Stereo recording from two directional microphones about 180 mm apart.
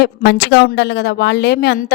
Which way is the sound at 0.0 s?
65° left (ahead or behind).